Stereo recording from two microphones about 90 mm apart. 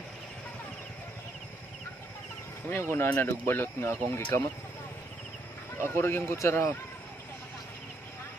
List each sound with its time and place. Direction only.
2.7 s speech: 30° left (ahead or behind)
5.8 s speech: 25° left (ahead or behind)